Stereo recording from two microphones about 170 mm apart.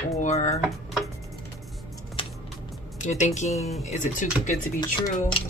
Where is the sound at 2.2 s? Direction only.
30° left (ahead or behind).